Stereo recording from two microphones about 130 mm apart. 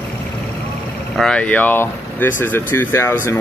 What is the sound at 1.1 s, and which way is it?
Speech, 5° left (ahead or behind).